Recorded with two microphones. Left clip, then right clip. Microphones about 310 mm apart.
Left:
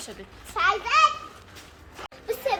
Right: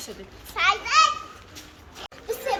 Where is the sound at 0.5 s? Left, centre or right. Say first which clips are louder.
Right 1 dB; left.